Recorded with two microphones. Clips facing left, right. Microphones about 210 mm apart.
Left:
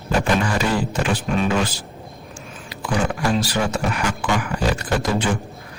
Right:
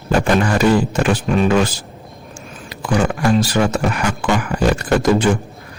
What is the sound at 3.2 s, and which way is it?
Speech, 45° right (ahead or behind).